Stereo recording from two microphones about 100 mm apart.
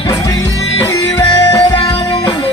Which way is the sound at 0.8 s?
35° left (ahead or behind).